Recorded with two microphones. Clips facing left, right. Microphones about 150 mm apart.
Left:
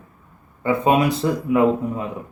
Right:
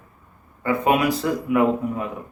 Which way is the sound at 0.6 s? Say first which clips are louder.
Left 2 dB; 25° left (ahead or behind).